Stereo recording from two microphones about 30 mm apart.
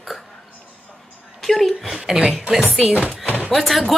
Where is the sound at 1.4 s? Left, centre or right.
Centre.